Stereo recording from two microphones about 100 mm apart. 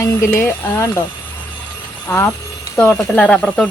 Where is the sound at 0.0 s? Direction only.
25° left (ahead or behind).